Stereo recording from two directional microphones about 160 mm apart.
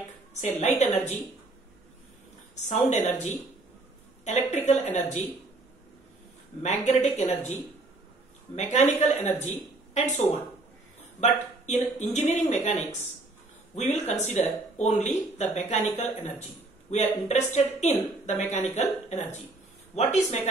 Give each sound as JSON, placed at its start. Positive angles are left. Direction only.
{"t": 0.6, "sound": "speech", "side_deg": 40}
{"t": 2.5, "sound": "speech", "side_deg": 45}
{"t": 6.6, "sound": "speech", "side_deg": 45}
{"t": 8.5, "sound": "speech", "side_deg": 45}
{"t": 11.1, "sound": "speech", "side_deg": 45}